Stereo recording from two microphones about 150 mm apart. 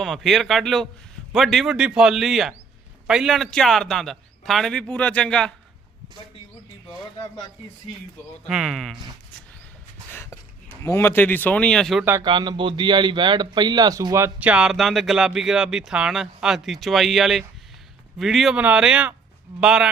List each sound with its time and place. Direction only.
0.0 s speech: centre (ahead or behind)
8.4 s speech: centre (ahead or behind)
10.1 s a sound: 15° left (ahead or behind)
10.8 s speech: 15° left (ahead or behind)
12.2 s speech: 30° right (ahead or behind)
14.3 s speech: 10° right (ahead or behind)